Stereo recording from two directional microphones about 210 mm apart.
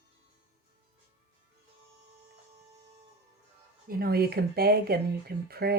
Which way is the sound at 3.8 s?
45° right (ahead or behind).